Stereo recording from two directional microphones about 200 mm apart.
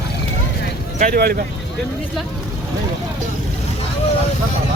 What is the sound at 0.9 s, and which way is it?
Speech, 45° right (ahead or behind).